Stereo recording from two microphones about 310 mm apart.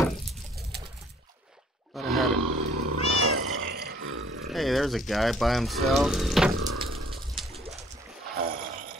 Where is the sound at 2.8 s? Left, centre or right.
Right.